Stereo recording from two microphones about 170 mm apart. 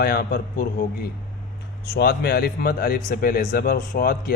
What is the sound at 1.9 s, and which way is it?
Speech, 70° left (ahead or behind).